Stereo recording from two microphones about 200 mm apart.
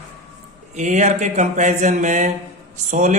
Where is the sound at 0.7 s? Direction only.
35° right (ahead or behind).